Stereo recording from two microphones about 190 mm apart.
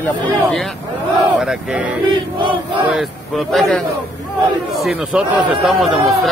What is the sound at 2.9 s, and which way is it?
Speech, centre (ahead or behind).